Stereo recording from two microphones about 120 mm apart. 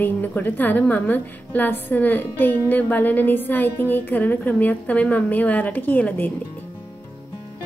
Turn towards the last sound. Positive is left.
turn(degrees=15)  # may be behind; listen again after turning